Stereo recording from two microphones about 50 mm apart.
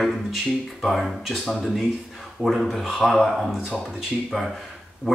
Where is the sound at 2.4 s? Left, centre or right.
Centre.